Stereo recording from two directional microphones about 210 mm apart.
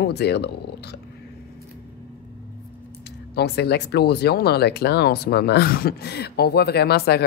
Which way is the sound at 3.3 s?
50° left (ahead or behind).